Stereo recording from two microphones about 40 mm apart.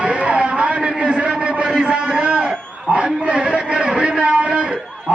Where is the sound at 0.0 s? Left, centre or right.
Right.